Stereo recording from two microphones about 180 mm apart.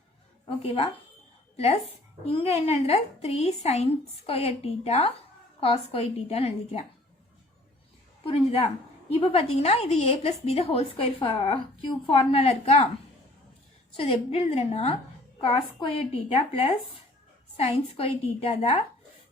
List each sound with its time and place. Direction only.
1.5 s a woman's voice: 35° left (ahead or behind)
8.2 s a woman's voice: 35° left (ahead or behind)
13.9 s a woman's voice: 30° left (ahead or behind)